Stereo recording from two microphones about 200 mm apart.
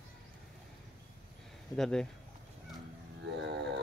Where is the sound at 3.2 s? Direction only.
60° right (ahead or behind).